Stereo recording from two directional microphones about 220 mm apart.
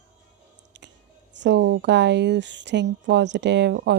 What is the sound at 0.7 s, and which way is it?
Whispering, 50° right (ahead or behind).